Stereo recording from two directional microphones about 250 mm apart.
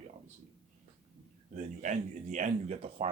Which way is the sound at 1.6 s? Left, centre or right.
Right.